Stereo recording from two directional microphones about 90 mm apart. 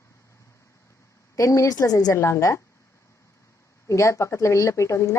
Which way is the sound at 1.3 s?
35° left (ahead or behind).